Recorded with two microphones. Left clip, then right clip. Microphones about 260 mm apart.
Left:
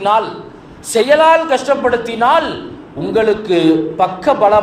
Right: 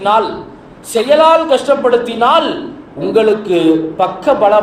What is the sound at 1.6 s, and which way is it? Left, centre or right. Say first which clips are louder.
A man's voice: right 3 dB; left.